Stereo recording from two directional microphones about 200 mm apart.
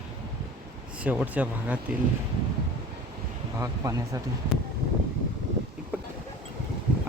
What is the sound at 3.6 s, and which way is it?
Speech, 15° right (ahead or behind).